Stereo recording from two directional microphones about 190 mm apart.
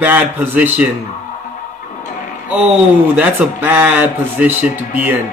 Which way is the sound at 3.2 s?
10° right (ahead or behind).